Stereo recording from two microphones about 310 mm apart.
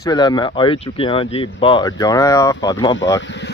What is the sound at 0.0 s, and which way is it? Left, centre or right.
Speech, centre.